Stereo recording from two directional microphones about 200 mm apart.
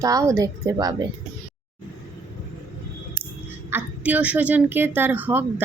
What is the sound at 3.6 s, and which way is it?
A woman's voice, 10° right (ahead or behind).